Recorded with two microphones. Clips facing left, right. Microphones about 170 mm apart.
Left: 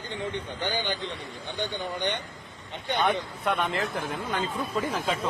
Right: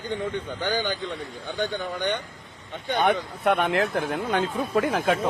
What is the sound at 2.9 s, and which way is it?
A man's voice, 60° right (ahead or behind).